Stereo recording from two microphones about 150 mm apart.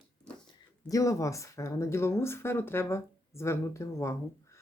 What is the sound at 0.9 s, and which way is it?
Speech, 20° left (ahead or behind).